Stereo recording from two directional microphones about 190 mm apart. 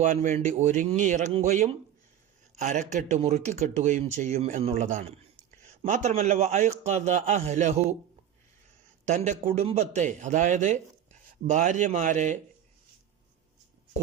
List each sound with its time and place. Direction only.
0.0 s a man's voice: 40° right (ahead or behind)
9.0 s a man's voice: 40° right (ahead or behind)